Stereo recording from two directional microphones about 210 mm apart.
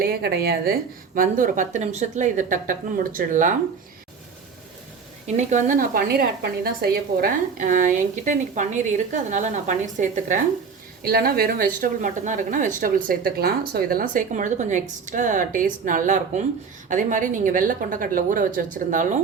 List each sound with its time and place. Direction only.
0.0 s a woman's voice: 50° right (ahead or behind)
5.2 s a woman's voice: 35° right (ahead or behind)